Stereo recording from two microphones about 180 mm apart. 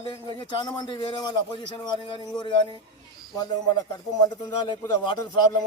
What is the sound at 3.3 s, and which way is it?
A man's voice, 25° left (ahead or behind).